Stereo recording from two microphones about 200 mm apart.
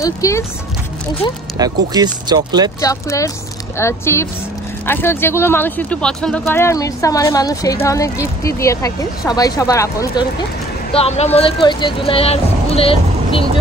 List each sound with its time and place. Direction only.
0.0 s speech: 15° left (ahead or behind)
1.6 s speech: 20° right (ahead or behind)
2.8 s speech: 15° left (ahead or behind)
10.9 s speech: 30° left (ahead or behind)